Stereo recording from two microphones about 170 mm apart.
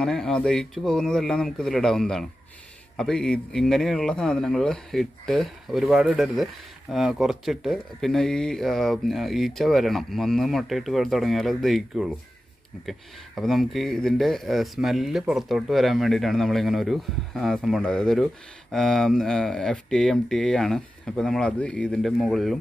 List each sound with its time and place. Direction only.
0.0 s speech: 5° left (ahead or behind)